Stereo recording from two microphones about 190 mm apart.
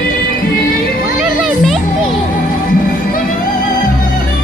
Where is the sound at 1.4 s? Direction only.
Centre (ahead or behind).